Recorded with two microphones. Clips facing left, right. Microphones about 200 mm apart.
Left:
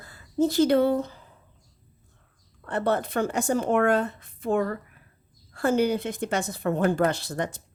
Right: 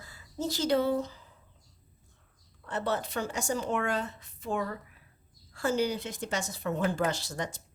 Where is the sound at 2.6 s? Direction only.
55° left (ahead or behind).